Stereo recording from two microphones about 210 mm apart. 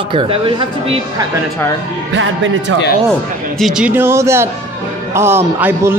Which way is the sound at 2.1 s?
60° right (ahead or behind).